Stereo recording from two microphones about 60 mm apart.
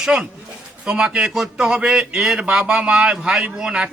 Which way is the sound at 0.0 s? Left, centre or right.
Centre.